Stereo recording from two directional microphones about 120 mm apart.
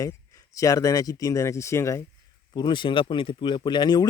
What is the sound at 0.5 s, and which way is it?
Speech, 25° left (ahead or behind).